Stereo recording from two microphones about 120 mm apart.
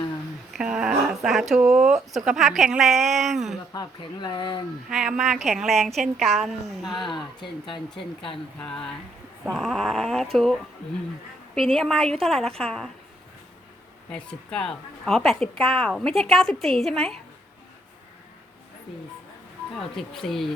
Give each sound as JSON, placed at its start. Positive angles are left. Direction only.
{"t": 0.5, "sound": "a woman's voice", "side_deg": -5}
{"t": 3.7, "sound": "speech", "side_deg": 35}
{"t": 4.9, "sound": "a woman's voice", "side_deg": -5}
{"t": 6.9, "sound": "speech", "side_deg": 40}
{"t": 8.6, "sound": "a woman's voice", "side_deg": 5}
{"t": 14.1, "sound": "a woman's voice", "side_deg": 10}
{"t": 19.7, "sound": "a woman's voice", "side_deg": 5}